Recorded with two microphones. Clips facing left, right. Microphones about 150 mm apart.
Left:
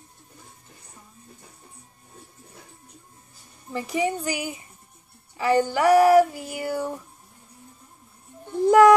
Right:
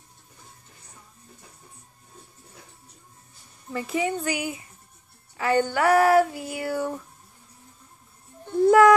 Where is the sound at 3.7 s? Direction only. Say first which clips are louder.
Left 1 dB; 15° left (ahead or behind).